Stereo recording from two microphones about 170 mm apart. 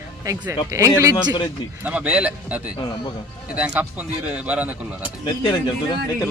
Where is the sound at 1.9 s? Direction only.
5° right (ahead or behind).